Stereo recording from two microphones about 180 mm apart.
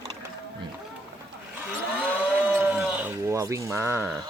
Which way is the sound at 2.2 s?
10° right (ahead or behind).